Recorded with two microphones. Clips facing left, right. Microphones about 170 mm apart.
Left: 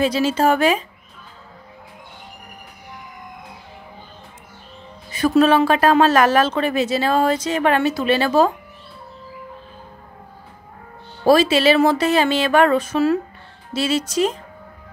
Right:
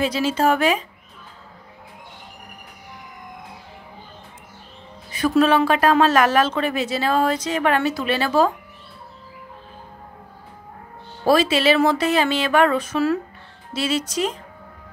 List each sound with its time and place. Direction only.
0.0 s speech: 30° left (ahead or behind)
5.1 s speech: 30° left (ahead or behind)
11.2 s speech: 35° left (ahead or behind)